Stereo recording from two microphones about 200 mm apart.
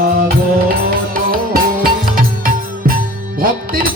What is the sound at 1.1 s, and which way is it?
Music, 45° right (ahead or behind).